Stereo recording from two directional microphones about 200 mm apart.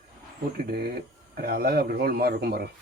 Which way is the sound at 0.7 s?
50° right (ahead or behind).